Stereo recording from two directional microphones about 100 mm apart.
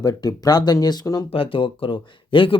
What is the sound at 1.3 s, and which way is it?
Speech, 65° left (ahead or behind).